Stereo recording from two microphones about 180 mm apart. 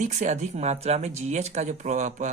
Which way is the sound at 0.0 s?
40° right (ahead or behind).